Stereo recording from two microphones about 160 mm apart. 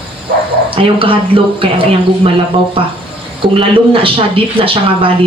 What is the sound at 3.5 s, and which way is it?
Speech, 35° right (ahead or behind).